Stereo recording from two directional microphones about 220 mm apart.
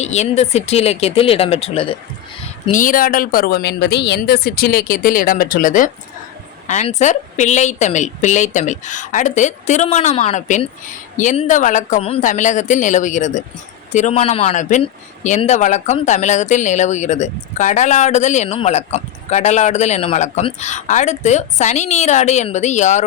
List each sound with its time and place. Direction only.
0.0 s speech: 30° left (ahead or behind)
2.6 s speech: 35° left (ahead or behind)